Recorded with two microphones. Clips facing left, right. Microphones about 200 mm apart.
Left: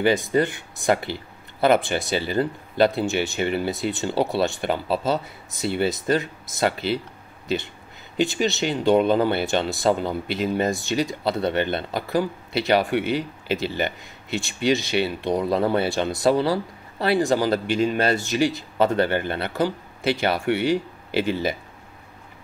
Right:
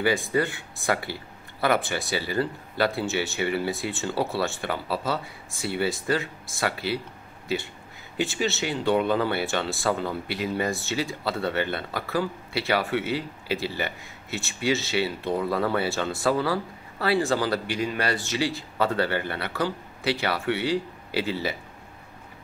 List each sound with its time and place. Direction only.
0.0 s speech: 20° left (ahead or behind)
8.2 s speech: 20° left (ahead or behind)
15.3 s speech: 20° left (ahead or behind)